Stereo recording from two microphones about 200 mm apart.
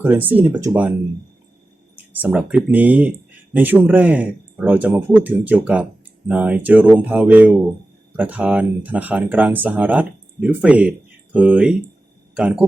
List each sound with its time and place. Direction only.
0.0 s speech: 10° right (ahead or behind)
2.2 s speech: 5° right (ahead or behind)